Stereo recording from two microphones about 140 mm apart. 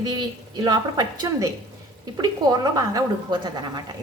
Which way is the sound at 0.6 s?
30° right (ahead or behind).